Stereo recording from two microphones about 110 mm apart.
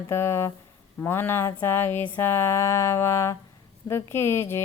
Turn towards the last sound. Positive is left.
turn(degrees=25)  # may be behind; listen again after turning